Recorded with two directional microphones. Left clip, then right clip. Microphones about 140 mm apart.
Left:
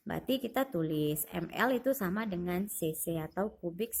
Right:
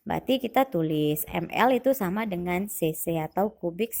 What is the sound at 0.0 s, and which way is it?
A woman's voice, 30° right (ahead or behind).